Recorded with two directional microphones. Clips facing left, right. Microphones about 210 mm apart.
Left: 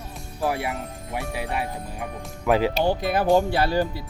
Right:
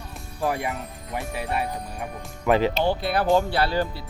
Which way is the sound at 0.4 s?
5° left (ahead or behind).